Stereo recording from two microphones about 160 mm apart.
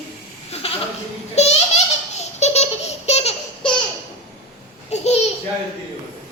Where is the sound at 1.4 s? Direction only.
45° left (ahead or behind).